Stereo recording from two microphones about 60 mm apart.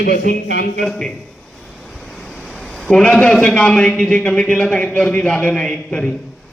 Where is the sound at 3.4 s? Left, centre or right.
Centre.